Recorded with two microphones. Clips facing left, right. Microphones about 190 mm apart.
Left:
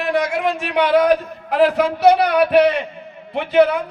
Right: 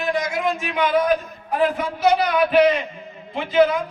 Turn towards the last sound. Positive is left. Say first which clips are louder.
# left 3 dB
turn(degrees=65)  # may be behind; listen again after turning